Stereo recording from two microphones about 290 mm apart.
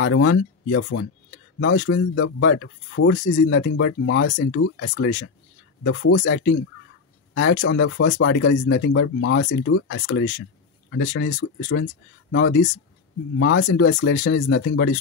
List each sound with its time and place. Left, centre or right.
0.0 s speech: left
7.6 s speech: left